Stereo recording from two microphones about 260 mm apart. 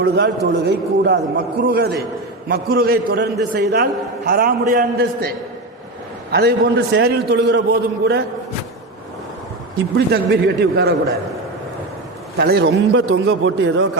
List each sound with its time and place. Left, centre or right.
0.0 s a man's voice: right
6.3 s a man's voice: right
9.7 s a man's voice: right
12.4 s a man's voice: right